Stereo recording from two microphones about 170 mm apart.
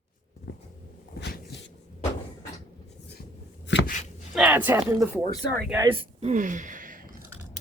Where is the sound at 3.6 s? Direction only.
90° left.